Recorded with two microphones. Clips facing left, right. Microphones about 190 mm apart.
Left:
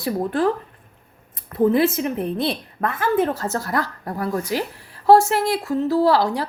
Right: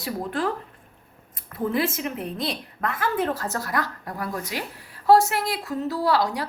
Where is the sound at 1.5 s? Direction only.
25° left (ahead or behind).